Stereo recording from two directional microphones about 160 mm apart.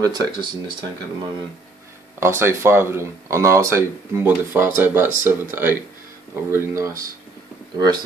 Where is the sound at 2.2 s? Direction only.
15° right (ahead or behind).